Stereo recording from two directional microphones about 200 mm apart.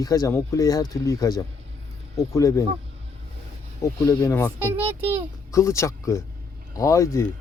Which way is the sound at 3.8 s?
15° left (ahead or behind).